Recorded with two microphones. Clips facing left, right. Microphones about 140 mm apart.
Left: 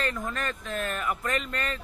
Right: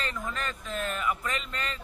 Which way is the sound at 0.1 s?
50° left (ahead or behind).